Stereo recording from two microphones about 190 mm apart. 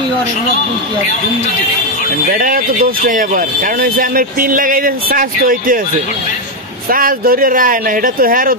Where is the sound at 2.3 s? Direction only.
50° right (ahead or behind).